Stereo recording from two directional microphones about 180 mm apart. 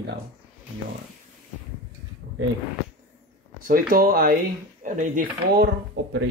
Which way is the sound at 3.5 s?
50° right (ahead or behind).